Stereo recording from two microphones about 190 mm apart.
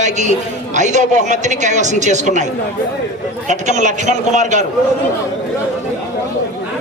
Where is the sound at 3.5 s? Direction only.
40° right (ahead or behind).